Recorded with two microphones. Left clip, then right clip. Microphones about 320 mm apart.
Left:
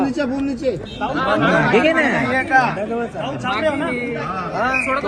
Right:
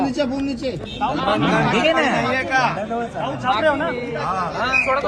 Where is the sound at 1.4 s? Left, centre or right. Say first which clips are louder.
Left 4 dB; centre.